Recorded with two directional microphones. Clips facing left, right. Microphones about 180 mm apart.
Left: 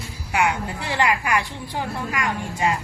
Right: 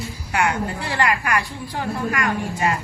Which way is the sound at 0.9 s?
15° left (ahead or behind).